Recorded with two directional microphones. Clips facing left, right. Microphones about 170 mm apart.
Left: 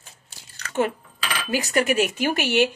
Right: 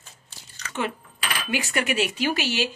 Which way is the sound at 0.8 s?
45° left (ahead or behind).